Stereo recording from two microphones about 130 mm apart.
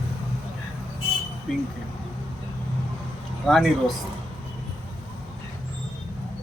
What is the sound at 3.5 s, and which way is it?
Speech, centre (ahead or behind).